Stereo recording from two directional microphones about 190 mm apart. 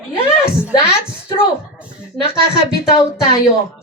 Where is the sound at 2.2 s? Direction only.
30° left (ahead or behind).